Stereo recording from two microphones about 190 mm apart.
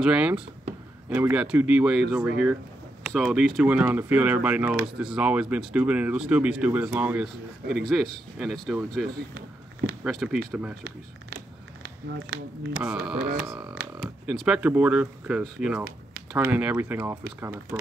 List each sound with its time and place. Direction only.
0.0 s speech: 5° right (ahead or behind)
10.0 s speech: 5° right (ahead or behind)
10.8 s a sound: 55° right (ahead or behind)
12.7 s speech: 5° right (ahead or behind)